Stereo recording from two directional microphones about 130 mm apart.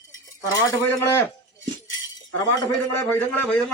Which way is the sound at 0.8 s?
15° left (ahead or behind).